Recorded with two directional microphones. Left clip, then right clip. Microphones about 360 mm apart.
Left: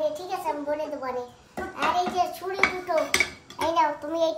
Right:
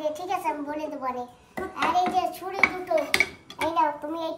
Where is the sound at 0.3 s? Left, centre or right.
Centre.